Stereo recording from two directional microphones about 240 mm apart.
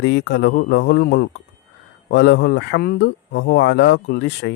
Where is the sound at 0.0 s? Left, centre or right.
Left.